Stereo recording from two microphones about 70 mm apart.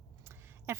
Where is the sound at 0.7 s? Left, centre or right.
Right.